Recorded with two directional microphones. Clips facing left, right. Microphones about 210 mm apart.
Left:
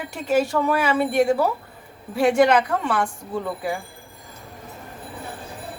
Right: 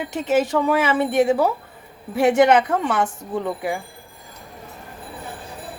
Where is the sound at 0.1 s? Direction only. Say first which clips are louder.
Right 1 dB; 20° right (ahead or behind).